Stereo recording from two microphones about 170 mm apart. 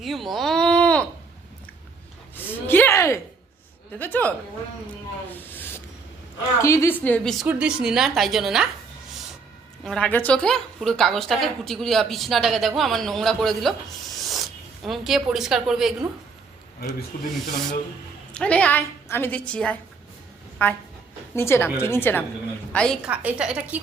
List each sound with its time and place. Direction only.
0.0 s a sound: centre (ahead or behind)
2.3 s a sound: 10° left (ahead or behind)
3.9 s a woman's voice: 10° left (ahead or behind)
5.3 s a sound: 10° left (ahead or behind)
6.6 s a woman's voice: 15° left (ahead or behind)
7.4 s speech: 5° right (ahead or behind)
9.8 s speech: 5° left (ahead or behind)
17.1 s speech: 55° left (ahead or behind)
18.3 s a woman's voice: 10° left (ahead or behind)
23.0 s a woman's voice: 10° right (ahead or behind)